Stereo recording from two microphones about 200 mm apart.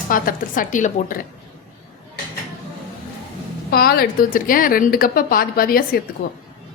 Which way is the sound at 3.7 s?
50° left (ahead or behind).